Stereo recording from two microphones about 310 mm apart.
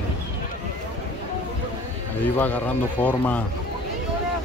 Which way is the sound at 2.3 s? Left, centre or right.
Centre.